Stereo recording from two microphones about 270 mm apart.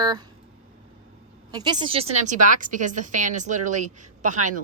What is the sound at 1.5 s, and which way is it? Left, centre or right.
A woman's voice, centre.